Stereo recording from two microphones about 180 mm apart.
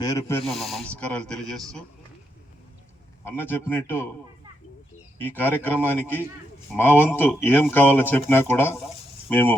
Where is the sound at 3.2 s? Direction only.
10° left (ahead or behind).